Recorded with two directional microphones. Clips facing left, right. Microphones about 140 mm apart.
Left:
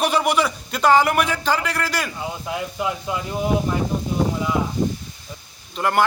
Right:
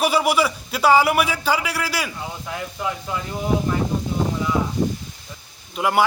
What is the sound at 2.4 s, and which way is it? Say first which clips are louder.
Speech: left 2 dB; 15° left (ahead or behind).